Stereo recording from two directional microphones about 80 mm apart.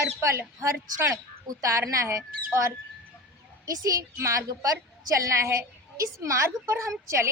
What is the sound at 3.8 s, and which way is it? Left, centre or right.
A woman's voice, right.